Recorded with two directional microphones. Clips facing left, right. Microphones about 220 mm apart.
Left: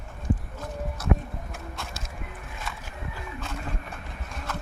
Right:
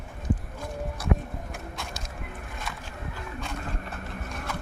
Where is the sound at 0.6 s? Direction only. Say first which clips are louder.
Even; 15° right (ahead or behind).